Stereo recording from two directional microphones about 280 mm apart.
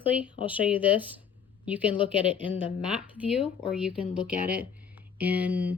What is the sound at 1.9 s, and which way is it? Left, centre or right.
Speech, centre.